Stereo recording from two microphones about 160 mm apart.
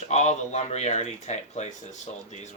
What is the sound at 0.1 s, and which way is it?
Speech, 45° left (ahead or behind).